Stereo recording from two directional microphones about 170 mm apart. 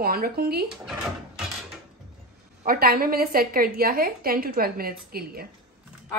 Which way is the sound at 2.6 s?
60° right (ahead or behind).